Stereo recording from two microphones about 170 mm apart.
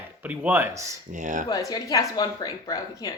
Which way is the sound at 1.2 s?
50° right (ahead or behind).